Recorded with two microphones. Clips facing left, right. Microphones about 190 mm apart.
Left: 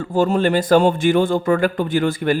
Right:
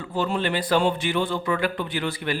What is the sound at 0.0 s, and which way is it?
Speech, 45° left (ahead or behind).